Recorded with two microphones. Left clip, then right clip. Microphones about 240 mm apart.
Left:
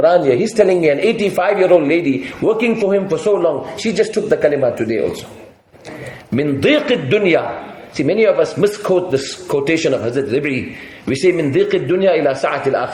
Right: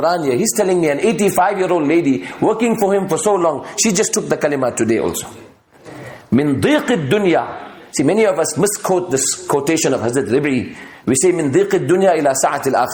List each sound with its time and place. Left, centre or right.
0.1 s speech: right
6.3 s speech: right